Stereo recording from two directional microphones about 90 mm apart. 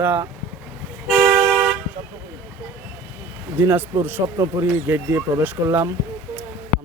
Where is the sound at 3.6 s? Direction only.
20° right (ahead or behind).